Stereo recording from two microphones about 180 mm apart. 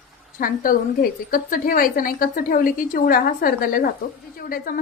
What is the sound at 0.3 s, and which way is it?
A woman's voice, 50° left (ahead or behind).